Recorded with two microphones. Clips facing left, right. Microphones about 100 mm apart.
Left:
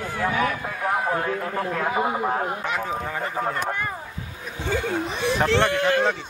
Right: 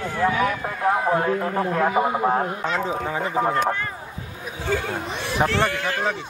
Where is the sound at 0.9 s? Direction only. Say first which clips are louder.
Right 2 dB; 20° right (ahead or behind).